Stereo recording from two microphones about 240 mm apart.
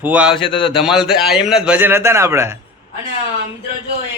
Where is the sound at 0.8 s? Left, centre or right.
Centre.